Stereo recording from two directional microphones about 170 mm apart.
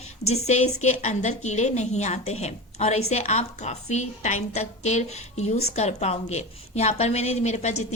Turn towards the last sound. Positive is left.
turn(degrees=40)  # may be behind; listen again after turning